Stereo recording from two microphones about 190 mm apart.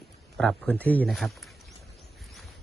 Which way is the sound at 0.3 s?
5° left (ahead or behind).